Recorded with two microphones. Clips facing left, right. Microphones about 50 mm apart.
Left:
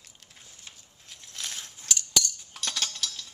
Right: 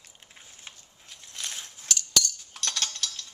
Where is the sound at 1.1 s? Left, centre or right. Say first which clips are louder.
Even; centre.